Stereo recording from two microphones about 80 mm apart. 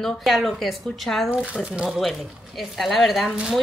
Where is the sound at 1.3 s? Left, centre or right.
Centre.